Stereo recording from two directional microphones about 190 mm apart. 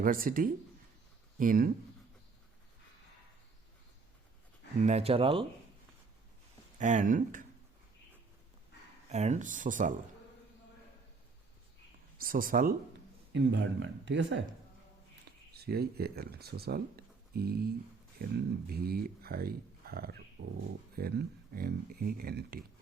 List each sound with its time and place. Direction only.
0.0 s speech: 45° right (ahead or behind)
4.8 s speech: 35° right (ahead or behind)
6.7 s speech: 40° right (ahead or behind)
9.0 s speech: 35° right (ahead or behind)
12.1 s speech: 50° right (ahead or behind)
13.3 s speech: 70° right (ahead or behind)
15.5 s speech: 55° right (ahead or behind)